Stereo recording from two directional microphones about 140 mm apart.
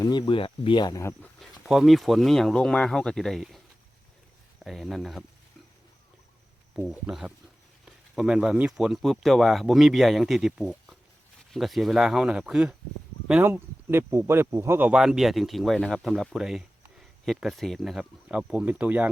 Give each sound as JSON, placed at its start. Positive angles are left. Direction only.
{"t": 0.0, "sound": "speech", "side_deg": 30}
{"t": 1.6, "sound": "speech", "side_deg": 0}
{"t": 4.6, "sound": "speech", "side_deg": 0}
{"t": 6.8, "sound": "speech", "side_deg": -5}